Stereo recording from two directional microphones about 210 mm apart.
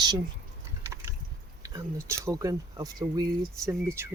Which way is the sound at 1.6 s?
15° right (ahead or behind).